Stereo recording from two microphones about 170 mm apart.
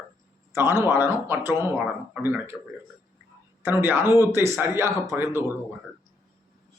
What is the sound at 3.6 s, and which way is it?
Speech, 15° right (ahead or behind).